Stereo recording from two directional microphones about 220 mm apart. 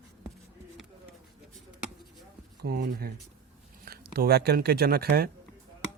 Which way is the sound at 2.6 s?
45° right (ahead or behind).